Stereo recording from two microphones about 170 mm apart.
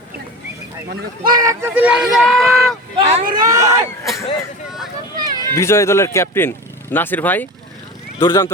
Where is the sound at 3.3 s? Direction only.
20° right (ahead or behind).